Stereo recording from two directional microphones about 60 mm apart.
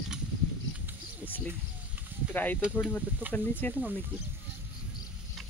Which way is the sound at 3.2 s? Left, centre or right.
Right.